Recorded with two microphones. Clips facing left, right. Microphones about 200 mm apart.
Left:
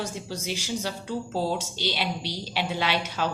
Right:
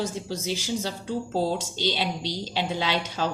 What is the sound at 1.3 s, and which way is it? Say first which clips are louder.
A woman's voice: right 2 dB; 20° right (ahead or behind).